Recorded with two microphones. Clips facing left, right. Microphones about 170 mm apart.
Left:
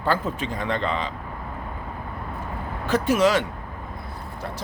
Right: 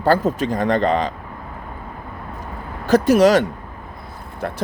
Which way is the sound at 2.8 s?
40° right (ahead or behind).